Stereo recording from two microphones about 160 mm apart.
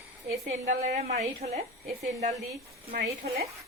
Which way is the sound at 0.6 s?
50° right (ahead or behind).